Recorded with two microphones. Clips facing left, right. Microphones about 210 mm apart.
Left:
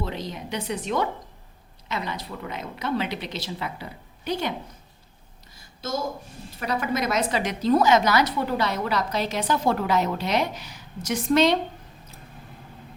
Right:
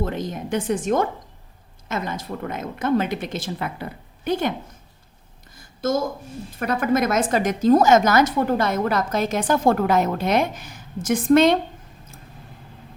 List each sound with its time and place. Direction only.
0.0 s a woman's voice: 50° right (ahead or behind)
5.5 s a sound: 50° right (ahead or behind)
6.6 s a woman's voice: 50° right (ahead or behind)